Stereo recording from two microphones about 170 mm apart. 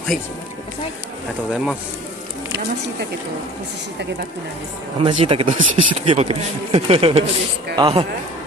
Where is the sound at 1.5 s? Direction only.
5° right (ahead or behind).